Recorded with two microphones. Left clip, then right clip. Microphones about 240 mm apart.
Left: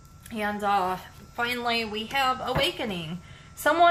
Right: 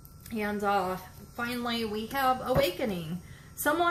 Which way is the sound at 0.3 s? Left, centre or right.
Left.